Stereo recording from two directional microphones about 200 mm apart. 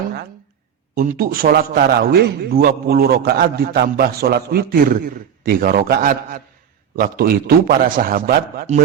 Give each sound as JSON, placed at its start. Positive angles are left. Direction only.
{"t": 0.9, "sound": "a man's voice", "side_deg": -45}